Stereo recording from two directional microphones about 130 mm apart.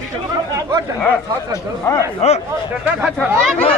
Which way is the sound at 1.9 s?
20° left (ahead or behind).